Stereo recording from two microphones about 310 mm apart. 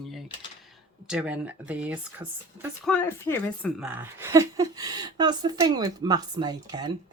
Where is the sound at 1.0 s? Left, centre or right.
Centre.